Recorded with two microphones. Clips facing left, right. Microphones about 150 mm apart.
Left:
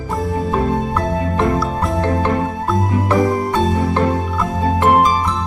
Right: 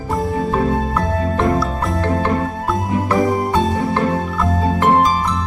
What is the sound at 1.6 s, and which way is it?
Music, centre (ahead or behind).